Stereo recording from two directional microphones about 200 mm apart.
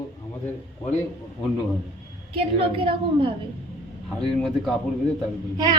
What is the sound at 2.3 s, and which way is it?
A woman's voice, 25° right (ahead or behind).